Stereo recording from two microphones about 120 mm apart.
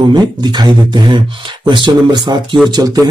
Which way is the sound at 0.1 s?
35° right (ahead or behind).